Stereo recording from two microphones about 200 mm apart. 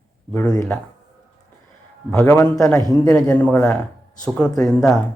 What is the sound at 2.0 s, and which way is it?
A man's voice, 10° left (ahead or behind).